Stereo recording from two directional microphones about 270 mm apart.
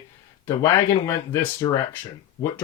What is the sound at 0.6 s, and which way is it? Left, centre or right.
Speech, centre.